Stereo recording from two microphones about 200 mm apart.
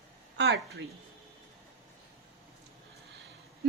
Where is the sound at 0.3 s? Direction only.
60° right (ahead or behind).